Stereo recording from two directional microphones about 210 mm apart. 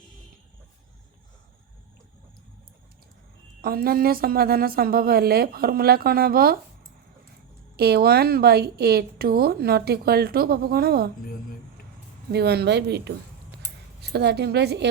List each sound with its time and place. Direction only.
3.6 s a woman's voice: 45° right (ahead or behind)
7.8 s a woman's voice: 50° right (ahead or behind)
12.3 s a woman's voice: 50° right (ahead or behind)